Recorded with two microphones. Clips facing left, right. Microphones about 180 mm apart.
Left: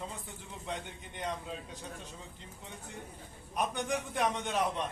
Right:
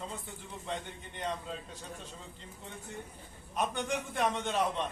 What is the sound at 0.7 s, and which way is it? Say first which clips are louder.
A man's voice: right 1 dB; 10° left (ahead or behind).